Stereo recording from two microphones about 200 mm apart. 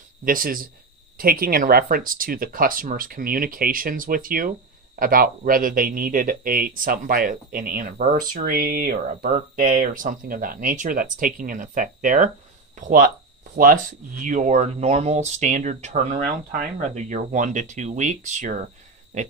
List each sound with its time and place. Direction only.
0.2 s speech: 45° right (ahead or behind)